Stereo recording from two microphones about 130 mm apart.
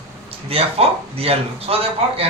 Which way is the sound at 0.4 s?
50° right (ahead or behind).